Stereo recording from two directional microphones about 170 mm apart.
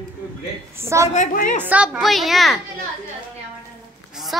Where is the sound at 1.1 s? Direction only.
50° left (ahead or behind).